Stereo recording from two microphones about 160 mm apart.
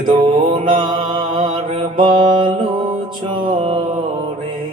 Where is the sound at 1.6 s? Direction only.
40° right (ahead or behind).